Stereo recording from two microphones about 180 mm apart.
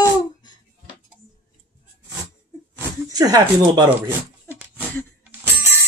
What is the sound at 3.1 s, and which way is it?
Speech, 20° right (ahead or behind).